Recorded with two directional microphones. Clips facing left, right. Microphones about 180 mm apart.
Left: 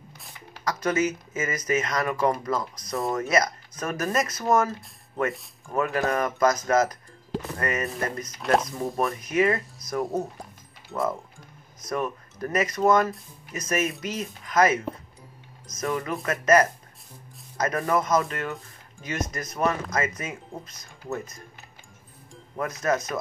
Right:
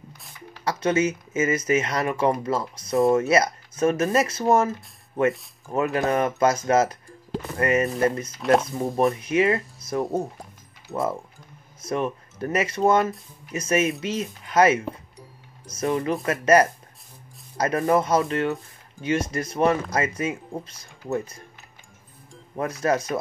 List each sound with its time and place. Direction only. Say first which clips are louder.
0.7 s speech: right 3 dB; 25° right (ahead or behind)
5.7 s speech: right 2 dB; 25° right (ahead or behind)
8.4 s speech: right 3 dB; centre (ahead or behind)
8.6 s speech: right 5 dB; 30° right (ahead or behind)
11.8 s speech: right 3 dB; 30° right (ahead or behind)
22.6 s speech: right 2 dB; 30° right (ahead or behind)